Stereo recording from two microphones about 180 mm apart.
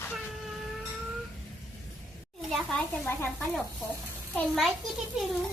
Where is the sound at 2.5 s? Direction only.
5° left (ahead or behind).